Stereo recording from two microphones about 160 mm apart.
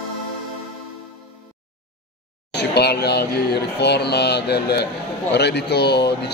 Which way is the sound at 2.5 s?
90° left.